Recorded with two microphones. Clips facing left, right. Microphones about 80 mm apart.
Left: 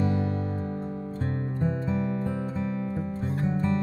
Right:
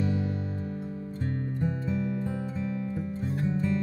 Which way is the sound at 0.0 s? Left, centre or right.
Left.